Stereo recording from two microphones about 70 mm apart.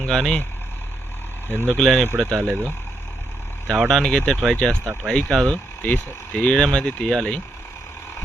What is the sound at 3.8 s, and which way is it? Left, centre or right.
Speech, centre.